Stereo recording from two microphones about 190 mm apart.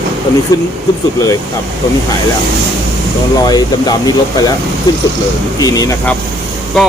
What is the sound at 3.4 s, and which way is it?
Speech, 20° left (ahead or behind).